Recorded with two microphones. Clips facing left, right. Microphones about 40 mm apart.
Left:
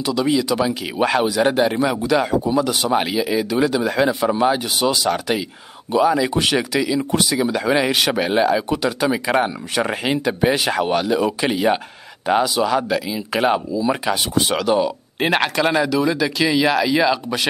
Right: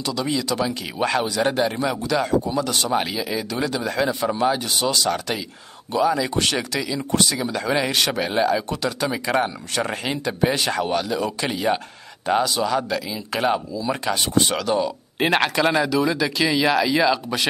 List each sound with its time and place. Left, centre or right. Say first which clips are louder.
0.0 s speech: left 5 dB; centre